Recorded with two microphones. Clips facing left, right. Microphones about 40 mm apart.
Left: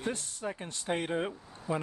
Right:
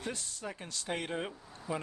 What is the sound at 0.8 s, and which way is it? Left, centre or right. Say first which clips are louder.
Speech: left 5 dB; left.